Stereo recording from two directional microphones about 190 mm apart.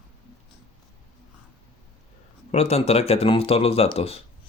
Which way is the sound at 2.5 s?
35° left (ahead or behind).